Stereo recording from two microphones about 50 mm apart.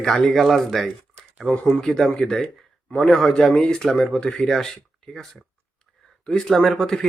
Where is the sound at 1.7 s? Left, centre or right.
Centre.